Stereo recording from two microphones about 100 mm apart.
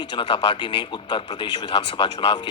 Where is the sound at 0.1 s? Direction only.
60° left (ahead or behind).